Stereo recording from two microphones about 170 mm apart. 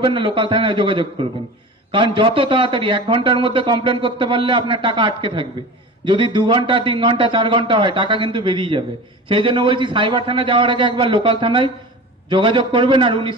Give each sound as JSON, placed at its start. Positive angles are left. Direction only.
{"t": 0.0, "sound": "a man's voice", "side_deg": -30}